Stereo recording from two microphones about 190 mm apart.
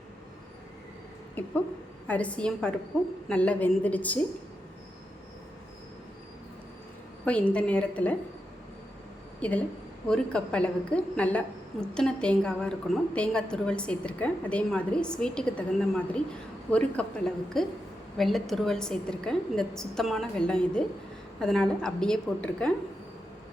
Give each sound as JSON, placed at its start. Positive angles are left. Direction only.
{"t": 1.4, "sound": "a woman's voice", "side_deg": 10}
{"t": 7.3, "sound": "a woman's voice", "side_deg": 5}
{"t": 9.4, "sound": "a woman's voice", "side_deg": 5}